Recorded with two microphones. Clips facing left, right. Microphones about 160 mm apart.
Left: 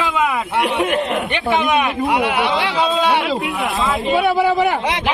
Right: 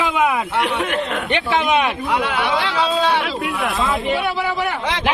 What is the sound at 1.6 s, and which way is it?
Speech, 20° right (ahead or behind).